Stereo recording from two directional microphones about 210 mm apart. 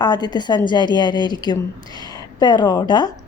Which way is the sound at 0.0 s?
20° left (ahead or behind).